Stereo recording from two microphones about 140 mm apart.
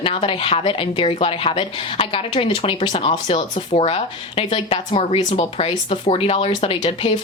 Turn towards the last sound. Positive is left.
turn(degrees=45)  # may be behind; listen again after turning